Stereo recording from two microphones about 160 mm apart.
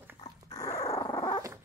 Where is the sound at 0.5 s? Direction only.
20° left (ahead or behind).